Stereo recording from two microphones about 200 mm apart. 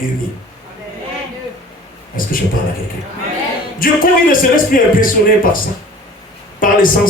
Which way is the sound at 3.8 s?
45° left (ahead or behind).